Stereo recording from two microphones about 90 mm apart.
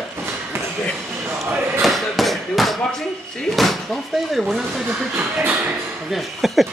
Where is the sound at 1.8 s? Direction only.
Centre (ahead or behind).